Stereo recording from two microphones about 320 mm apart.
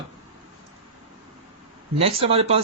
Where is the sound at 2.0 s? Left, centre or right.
Centre.